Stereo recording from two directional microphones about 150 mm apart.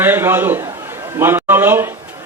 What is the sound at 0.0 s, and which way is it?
A man's voice, 15° right (ahead or behind).